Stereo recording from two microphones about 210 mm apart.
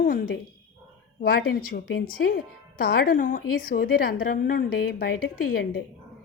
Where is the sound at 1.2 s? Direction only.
45° left (ahead or behind).